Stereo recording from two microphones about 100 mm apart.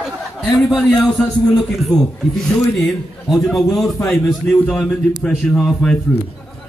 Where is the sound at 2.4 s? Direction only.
Centre (ahead or behind).